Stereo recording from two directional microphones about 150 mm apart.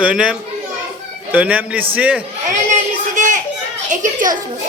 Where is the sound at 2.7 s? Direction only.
55° right (ahead or behind).